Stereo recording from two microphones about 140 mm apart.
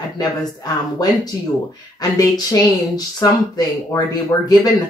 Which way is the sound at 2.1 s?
25° left (ahead or behind).